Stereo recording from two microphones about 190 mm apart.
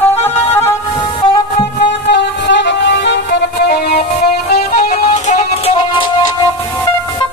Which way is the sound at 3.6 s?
55° left (ahead or behind).